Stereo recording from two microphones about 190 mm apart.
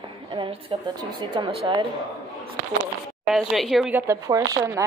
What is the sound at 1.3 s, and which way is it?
Speech, 25° right (ahead or behind).